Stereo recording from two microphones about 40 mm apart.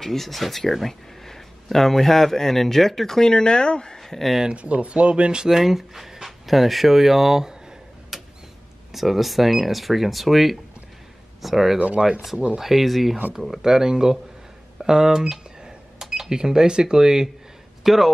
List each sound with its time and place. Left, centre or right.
0.0 s speech: centre
3.2 s speech: centre
4.0 s speech: centre
4.6 s speech: right; by 7.5 s centre
8.1 s a sound: centre
8.9 s speech: centre
17.8 s speech: centre